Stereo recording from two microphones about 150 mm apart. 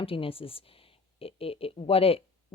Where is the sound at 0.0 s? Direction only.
40° left (ahead or behind).